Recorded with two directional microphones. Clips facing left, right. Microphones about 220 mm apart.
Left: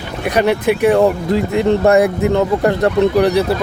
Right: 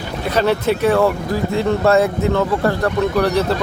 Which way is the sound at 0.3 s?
15° left (ahead or behind).